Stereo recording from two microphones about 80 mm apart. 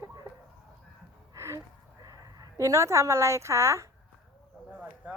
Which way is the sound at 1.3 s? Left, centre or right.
Right.